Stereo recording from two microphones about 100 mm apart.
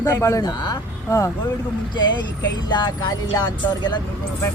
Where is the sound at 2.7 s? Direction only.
45° left (ahead or behind).